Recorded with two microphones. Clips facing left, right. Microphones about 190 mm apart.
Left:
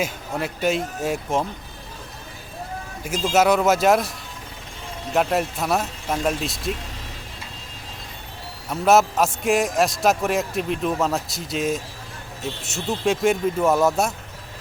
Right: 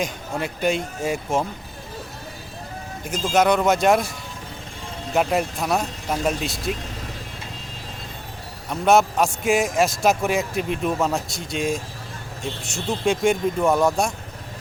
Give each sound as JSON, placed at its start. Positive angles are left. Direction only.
{"t": 0.0, "sound": "a man's voice", "side_deg": 0}
{"t": 3.0, "sound": "a man's voice", "side_deg": 5}
{"t": 5.1, "sound": "a man's voice", "side_deg": 0}
{"t": 8.7, "sound": "a man's voice", "side_deg": 5}